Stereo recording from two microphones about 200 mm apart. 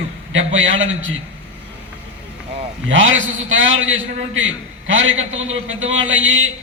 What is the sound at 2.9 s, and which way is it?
A man's voice, 70° right (ahead or behind).